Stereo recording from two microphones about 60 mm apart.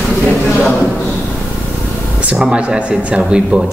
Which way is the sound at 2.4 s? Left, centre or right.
Centre.